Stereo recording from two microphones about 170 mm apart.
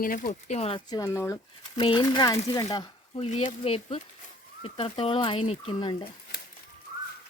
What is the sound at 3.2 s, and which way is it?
Speech, 40° left (ahead or behind).